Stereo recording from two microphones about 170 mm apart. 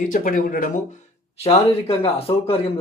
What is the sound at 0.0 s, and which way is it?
Speech, 50° left (ahead or behind).